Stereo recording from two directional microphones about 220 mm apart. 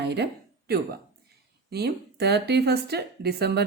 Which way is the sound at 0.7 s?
45° right (ahead or behind).